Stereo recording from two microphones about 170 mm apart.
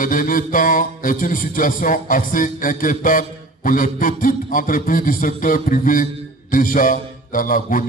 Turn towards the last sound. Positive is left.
turn(degrees=50)  # may be behind; listen again after turning